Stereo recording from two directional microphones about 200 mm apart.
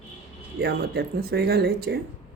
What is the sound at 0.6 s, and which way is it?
Speech, 50° right (ahead or behind).